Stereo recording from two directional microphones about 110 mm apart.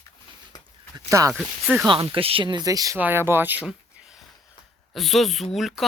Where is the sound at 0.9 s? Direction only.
30° right (ahead or behind).